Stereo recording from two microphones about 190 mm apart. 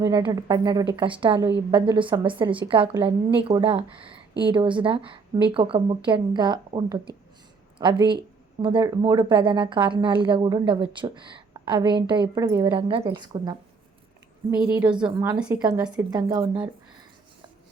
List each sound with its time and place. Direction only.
0.0 s a woman's voice: 20° right (ahead or behind)
14.7 s a woman's voice: 10° right (ahead or behind)
16.0 s a woman's voice: 20° right (ahead or behind)